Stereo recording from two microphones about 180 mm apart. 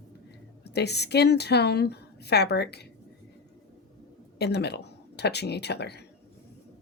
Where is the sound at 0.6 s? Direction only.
65° left (ahead or behind).